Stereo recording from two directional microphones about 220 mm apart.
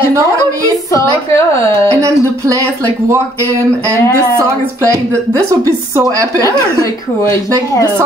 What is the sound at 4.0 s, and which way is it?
Speech, 10° left (ahead or behind).